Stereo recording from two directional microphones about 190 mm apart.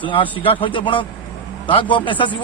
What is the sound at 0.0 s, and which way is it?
A man's voice, 25° left (ahead or behind).